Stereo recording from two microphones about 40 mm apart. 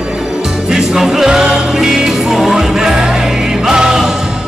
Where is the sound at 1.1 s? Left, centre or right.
Centre.